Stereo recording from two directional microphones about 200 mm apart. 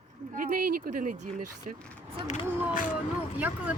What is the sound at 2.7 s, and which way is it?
Speech, 40° left (ahead or behind).